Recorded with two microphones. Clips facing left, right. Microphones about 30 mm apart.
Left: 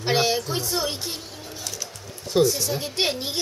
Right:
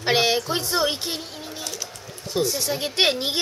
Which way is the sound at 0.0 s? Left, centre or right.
Right.